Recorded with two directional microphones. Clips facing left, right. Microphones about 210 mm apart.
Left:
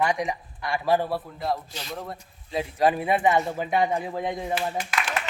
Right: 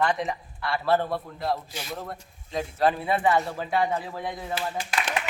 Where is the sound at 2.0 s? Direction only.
5° left (ahead or behind).